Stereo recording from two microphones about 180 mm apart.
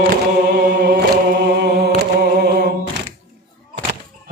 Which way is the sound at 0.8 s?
60° right (ahead or behind).